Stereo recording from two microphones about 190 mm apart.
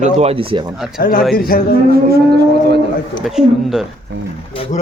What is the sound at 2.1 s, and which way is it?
Speech, 55° right (ahead or behind).